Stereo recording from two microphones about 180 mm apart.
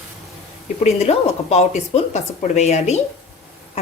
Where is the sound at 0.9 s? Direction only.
35° left (ahead or behind).